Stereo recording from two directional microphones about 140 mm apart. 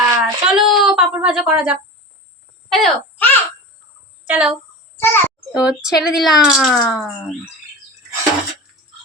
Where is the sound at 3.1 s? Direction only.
10° left (ahead or behind).